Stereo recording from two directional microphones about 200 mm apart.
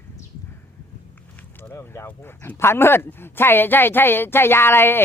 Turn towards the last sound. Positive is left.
turn(degrees=10)  # may be behind; listen again after turning